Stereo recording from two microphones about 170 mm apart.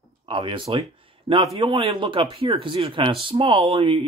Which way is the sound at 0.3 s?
30° right (ahead or behind).